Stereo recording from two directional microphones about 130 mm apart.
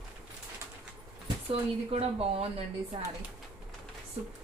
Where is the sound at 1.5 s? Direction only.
50° right (ahead or behind).